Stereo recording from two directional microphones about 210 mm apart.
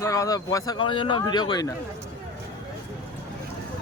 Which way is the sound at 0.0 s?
15° left (ahead or behind).